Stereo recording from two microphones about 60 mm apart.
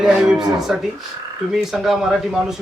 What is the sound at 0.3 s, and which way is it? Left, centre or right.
Speech, centre.